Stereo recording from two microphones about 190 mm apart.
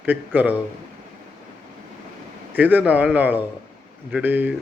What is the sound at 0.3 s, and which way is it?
Speech, 10° right (ahead or behind).